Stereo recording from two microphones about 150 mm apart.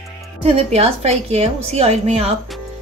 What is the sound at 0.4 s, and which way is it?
A woman's voice, 45° right (ahead or behind).